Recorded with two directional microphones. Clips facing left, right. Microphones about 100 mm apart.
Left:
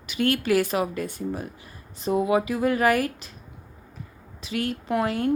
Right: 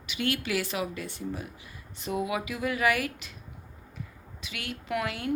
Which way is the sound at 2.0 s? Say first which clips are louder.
Left 8 dB; 35° left (ahead or behind).